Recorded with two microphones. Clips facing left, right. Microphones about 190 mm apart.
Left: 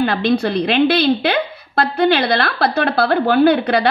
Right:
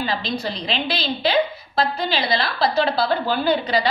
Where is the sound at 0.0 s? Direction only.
60° left (ahead or behind).